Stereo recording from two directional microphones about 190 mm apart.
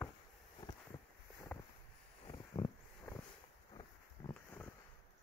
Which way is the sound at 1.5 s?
5° left (ahead or behind).